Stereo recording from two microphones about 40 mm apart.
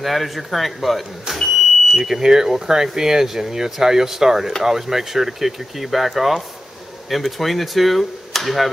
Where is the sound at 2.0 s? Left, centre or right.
Centre.